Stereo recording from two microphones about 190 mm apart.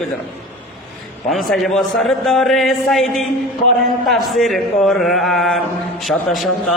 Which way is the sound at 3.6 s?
40° left (ahead or behind).